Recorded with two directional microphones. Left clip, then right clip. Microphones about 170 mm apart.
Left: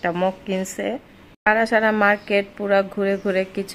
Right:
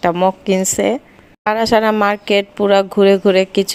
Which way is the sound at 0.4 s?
35° right (ahead or behind).